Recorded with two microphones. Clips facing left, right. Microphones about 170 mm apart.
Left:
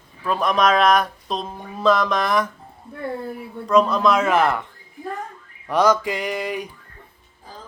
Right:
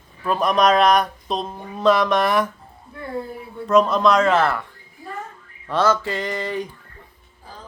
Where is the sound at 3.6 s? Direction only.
5° right (ahead or behind); by 4.7 s 20° left (ahead or behind).